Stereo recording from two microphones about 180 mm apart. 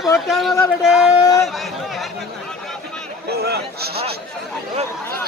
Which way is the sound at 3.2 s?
65° right (ahead or behind).